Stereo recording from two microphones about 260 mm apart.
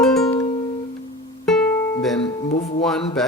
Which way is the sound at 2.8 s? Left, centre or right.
Centre.